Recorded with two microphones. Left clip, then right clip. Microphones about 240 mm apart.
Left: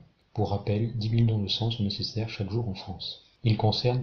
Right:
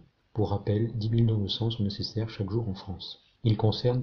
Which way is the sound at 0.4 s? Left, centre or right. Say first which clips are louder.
Even; right.